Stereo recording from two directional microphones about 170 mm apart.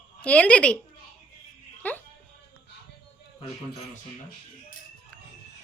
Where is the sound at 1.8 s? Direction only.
10° left (ahead or behind).